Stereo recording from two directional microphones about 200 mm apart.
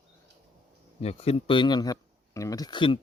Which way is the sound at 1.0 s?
30° left (ahead or behind).